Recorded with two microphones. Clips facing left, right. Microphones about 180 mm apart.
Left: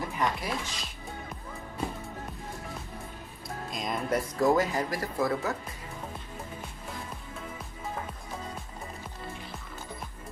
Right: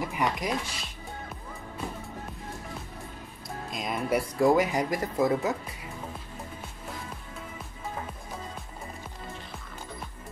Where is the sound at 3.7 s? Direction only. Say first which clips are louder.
Right 2 dB; 5° right (ahead or behind).